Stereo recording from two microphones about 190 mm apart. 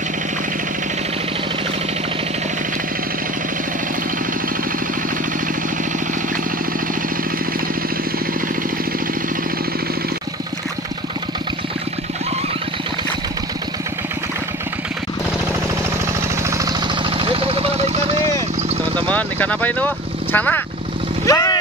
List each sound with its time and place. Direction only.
16.4 s vehicle: 15° right (ahead or behind)
18.9 s vehicle: 5° left (ahead or behind)